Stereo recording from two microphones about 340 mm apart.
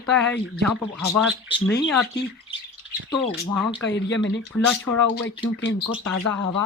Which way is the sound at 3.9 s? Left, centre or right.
Left.